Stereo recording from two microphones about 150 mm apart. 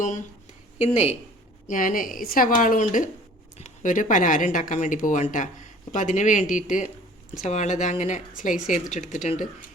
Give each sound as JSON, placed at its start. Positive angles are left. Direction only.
{"t": 0.0, "sound": "speech", "side_deg": 55}
{"t": 1.6, "sound": "speech", "side_deg": 65}